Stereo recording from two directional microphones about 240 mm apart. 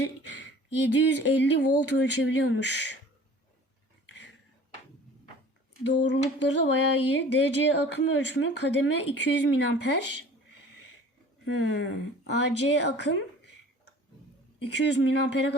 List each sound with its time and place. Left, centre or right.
0.2 s a sound: left
0.9 s speech: left
6.1 s speech: left
11.4 s speech: left
14.6 s speech: left